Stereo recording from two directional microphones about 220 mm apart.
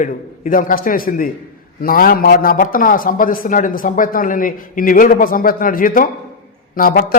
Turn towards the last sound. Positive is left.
turn(degrees=40)  # may be behind; listen again after turning